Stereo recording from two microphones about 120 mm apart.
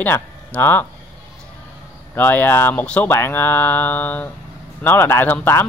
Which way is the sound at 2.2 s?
15° left (ahead or behind).